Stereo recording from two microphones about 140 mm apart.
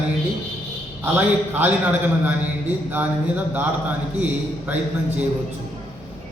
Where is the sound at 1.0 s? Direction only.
15° right (ahead or behind).